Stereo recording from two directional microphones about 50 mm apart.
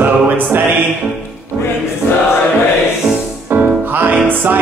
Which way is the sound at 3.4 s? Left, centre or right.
Right.